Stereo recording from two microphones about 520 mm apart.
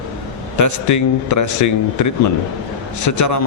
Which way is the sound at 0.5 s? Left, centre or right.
Left.